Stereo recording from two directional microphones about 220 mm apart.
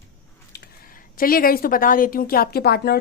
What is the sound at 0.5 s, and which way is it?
A woman's voice, 40° left (ahead or behind).